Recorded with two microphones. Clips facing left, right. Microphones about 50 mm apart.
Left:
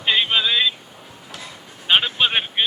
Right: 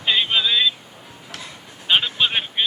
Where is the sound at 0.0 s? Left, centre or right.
Centre.